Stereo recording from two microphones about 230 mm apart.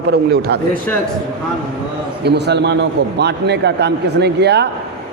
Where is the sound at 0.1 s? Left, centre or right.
Right.